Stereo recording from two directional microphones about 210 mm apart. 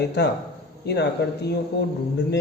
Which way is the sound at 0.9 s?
55° left (ahead or behind).